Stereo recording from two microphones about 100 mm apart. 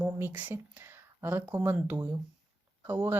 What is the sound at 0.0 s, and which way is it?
Speech, 20° right (ahead or behind).